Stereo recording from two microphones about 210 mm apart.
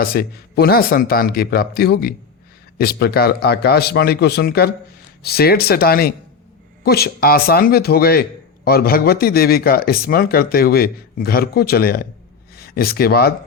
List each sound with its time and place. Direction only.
0.0 s a man's voice: 45° left (ahead or behind)